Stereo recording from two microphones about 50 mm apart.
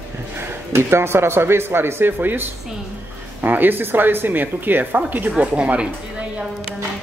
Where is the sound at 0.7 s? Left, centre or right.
Right.